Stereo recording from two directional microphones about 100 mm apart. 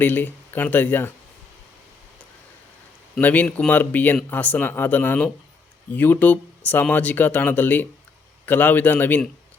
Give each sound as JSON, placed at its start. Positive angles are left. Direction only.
{"t": 0.0, "sound": "speech", "side_deg": 20}
{"t": 3.2, "sound": "speech", "side_deg": 15}